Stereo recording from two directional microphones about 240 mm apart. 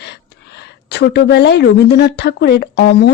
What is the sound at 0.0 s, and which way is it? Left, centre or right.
A woman's voice, left.